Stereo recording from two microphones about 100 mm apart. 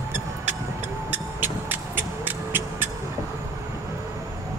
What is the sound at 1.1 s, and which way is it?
Vehicle, 20° right (ahead or behind).